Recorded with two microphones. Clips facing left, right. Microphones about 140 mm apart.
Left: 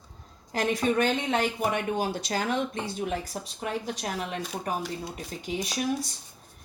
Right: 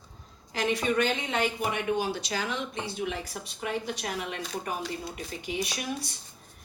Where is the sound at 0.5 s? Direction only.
45° left (ahead or behind).